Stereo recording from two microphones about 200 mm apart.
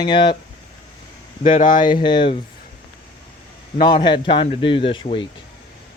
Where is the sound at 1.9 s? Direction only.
25° left (ahead or behind).